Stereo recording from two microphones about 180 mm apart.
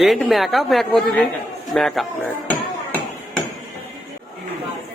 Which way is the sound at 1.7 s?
Centre (ahead or behind).